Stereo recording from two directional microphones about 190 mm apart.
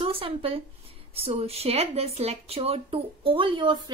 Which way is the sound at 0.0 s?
30° right (ahead or behind).